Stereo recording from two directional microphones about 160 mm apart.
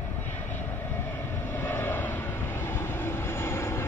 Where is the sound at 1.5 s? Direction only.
15° left (ahead or behind).